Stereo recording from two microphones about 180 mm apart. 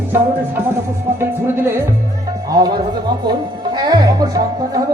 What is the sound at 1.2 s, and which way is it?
Music, 15° right (ahead or behind).